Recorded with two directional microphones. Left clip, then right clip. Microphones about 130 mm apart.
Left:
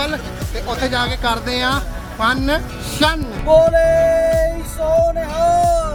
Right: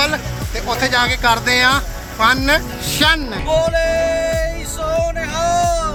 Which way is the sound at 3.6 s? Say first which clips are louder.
Left 4 dB; 65° left (ahead or behind).